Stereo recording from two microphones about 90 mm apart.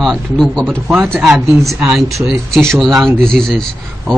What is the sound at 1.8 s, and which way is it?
Speech, 5° right (ahead or behind).